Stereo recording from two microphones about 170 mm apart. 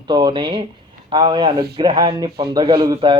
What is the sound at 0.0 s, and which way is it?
Speech, 25° right (ahead or behind).